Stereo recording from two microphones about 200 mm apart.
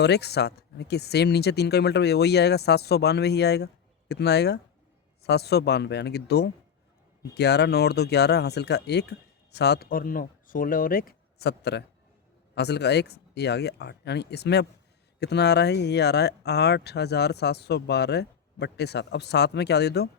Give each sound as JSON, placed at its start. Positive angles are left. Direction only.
{"t": 0.0, "sound": "speech", "side_deg": 55}